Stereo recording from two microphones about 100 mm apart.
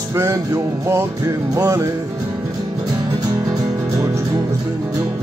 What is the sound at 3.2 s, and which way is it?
Music, 40° right (ahead or behind).